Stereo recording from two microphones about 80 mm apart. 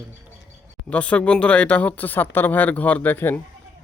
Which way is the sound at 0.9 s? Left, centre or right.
Centre.